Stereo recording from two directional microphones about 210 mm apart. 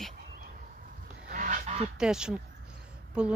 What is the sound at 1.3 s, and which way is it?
Goose, 40° right (ahead or behind).